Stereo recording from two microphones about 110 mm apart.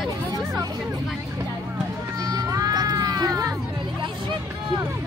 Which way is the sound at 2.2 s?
35° right (ahead or behind).